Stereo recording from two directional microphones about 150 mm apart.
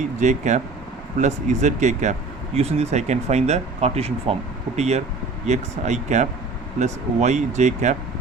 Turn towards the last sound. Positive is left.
turn(degrees=-50)  # may be behind; listen again after turning